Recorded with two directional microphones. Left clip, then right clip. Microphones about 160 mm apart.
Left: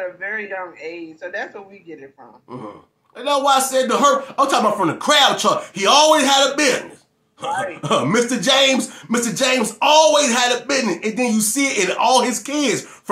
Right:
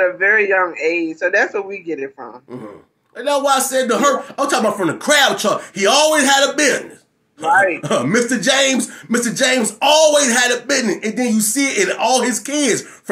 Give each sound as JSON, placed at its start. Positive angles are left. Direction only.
{"t": 0.0, "sound": "speech", "side_deg": -35}
{"t": 3.2, "sound": "speech", "side_deg": 0}
{"t": 7.4, "sound": "speech", "side_deg": -35}
{"t": 7.8, "sound": "speech", "side_deg": 5}